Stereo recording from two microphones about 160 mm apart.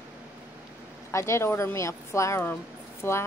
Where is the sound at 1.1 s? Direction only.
15° left (ahead or behind).